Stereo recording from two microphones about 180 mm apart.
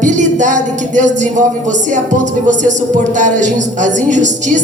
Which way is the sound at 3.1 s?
45° right (ahead or behind).